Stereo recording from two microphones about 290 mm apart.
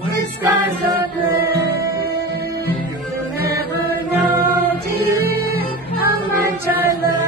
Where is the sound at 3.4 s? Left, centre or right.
Left.